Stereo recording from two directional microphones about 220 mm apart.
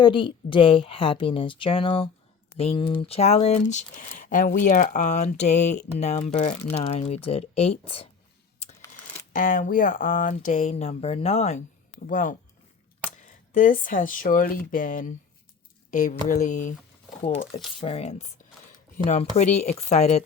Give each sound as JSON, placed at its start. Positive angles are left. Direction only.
{"t": 0.0, "sound": "a woman's voice", "side_deg": 20}
{"t": 9.3, "sound": "speech", "side_deg": 35}
{"t": 13.5, "sound": "speech", "side_deg": 40}
{"t": 17.7, "sound": "a woman's voice", "side_deg": 25}